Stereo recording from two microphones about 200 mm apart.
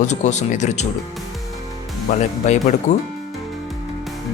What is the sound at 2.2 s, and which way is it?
Speech, 35° left (ahead or behind).